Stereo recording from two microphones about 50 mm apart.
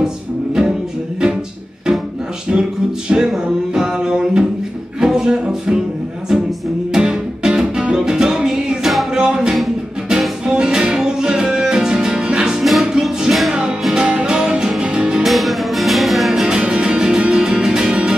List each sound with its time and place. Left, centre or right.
0.0 s music: centre
2.5 s music: centre
6.9 s music: centre
15.2 s music: centre
16.4 s music: centre